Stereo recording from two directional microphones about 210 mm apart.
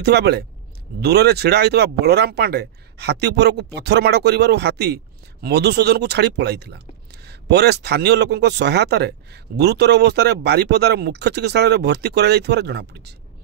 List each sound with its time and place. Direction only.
0.0 s speech: 50° right (ahead or behind)